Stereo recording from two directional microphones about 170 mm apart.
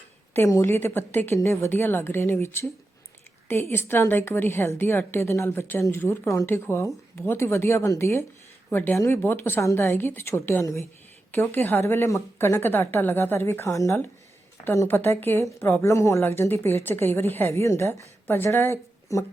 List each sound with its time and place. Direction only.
0.3 s a woman's voice: 15° left (ahead or behind)